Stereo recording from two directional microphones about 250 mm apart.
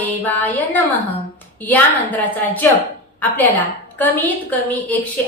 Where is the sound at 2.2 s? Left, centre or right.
Centre.